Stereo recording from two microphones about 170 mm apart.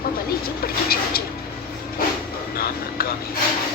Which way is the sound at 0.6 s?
60° left (ahead or behind).